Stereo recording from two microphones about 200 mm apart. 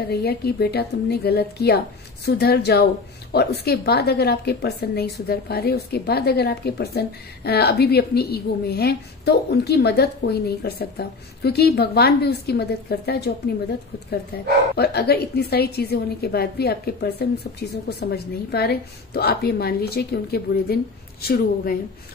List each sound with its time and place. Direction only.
0.1 s a woman's voice: 55° left (ahead or behind)
14.8 s a woman's voice: 55° left (ahead or behind)